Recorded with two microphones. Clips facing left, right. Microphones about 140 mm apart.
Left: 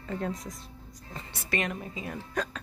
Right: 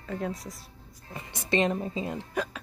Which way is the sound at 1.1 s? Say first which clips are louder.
Right 5 dB; 15° right (ahead or behind).